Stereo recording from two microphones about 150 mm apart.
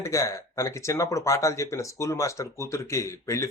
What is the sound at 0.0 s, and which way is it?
Speech, 20° left (ahead or behind).